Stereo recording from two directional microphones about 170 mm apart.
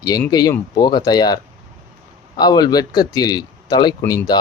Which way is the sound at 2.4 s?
25° left (ahead or behind).